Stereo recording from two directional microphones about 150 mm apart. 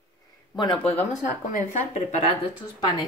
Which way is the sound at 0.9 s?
50° left (ahead or behind).